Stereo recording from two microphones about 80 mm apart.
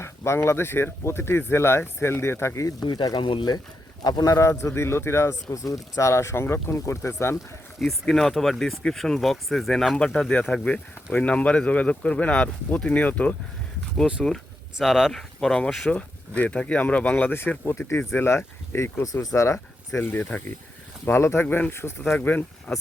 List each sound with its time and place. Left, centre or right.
0.0 s speech: left
2.8 s speech: left
4.0 s speech: left
4.4 s speech: left
7.3 s speech: centre
10.2 s speech: centre
14.3 s speech: centre; by 19.0 s left
19.0 s speech: left
20.0 s speech: left
21.4 s speech: centre
21.7 s speech: left